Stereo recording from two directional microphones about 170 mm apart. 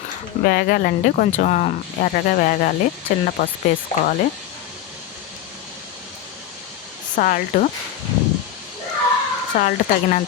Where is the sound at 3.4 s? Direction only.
80° left.